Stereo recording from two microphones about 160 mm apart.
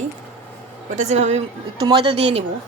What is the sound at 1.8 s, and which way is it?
Speech, 30° right (ahead or behind).